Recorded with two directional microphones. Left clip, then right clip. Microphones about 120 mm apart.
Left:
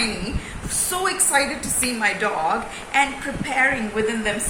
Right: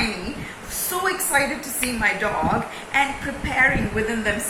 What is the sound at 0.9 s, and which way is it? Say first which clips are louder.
A woman's voice: even; 30° left (ahead or behind).